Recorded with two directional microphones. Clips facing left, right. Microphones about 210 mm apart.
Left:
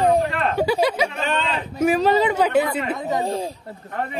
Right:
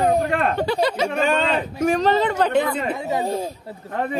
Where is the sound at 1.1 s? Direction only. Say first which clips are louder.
Right 5 dB; 45° right (ahead or behind).